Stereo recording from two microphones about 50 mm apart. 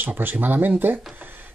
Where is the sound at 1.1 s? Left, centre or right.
Right.